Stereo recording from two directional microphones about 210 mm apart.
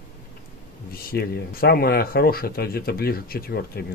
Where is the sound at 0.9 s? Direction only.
45° left (ahead or behind).